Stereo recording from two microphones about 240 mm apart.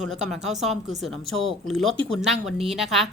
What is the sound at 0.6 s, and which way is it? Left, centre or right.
A woman's voice, centre.